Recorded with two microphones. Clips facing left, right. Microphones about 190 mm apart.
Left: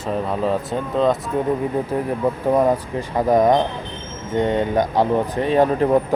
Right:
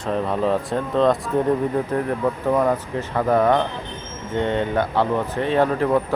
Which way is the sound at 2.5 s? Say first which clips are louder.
Left 3 dB; 20° left (ahead or behind).